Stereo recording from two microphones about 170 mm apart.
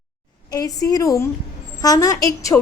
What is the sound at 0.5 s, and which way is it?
Speech, 20° left (ahead or behind).